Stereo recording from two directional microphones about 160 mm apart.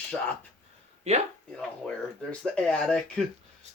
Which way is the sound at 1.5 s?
5° left (ahead or behind).